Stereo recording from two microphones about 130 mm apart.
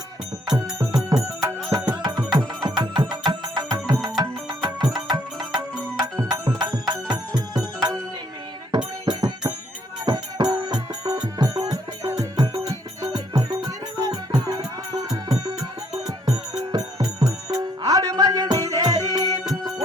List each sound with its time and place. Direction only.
0.4 s music: 30° right (ahead or behind)
9.0 s music: 30° right (ahead or behind)